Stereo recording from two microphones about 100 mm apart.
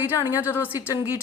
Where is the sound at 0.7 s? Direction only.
35° left (ahead or behind).